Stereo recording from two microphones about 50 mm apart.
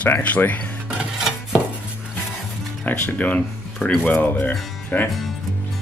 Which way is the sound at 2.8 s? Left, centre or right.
Left.